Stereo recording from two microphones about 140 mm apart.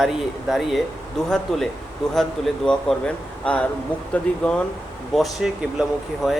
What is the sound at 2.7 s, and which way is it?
A man's voice, 5° left (ahead or behind).